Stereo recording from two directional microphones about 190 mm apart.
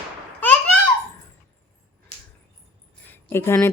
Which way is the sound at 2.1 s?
35° left (ahead or behind).